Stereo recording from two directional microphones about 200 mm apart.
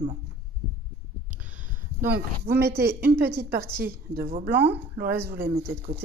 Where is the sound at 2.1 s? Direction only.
55° right (ahead or behind).